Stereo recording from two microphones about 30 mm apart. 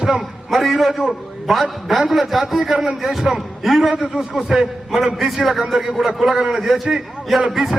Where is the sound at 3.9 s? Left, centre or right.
Centre.